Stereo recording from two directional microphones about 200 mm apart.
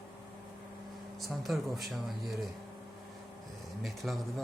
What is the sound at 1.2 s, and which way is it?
Speech, centre (ahead or behind).